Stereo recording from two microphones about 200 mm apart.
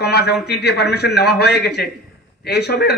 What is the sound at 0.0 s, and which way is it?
A man's voice, 55° left (ahead or behind).